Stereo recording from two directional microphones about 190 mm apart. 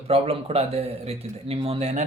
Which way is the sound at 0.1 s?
30° right (ahead or behind).